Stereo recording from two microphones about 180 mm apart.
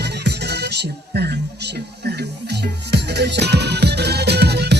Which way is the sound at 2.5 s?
65° right (ahead or behind).